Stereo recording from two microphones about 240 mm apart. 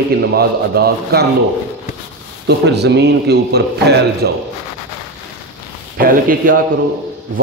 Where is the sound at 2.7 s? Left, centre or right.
Right.